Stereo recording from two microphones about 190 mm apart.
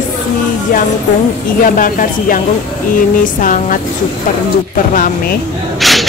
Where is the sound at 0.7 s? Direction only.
45° left (ahead or behind).